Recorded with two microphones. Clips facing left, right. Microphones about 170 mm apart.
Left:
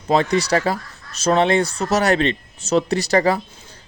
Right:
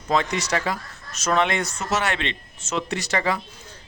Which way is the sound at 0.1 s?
35° left (ahead or behind).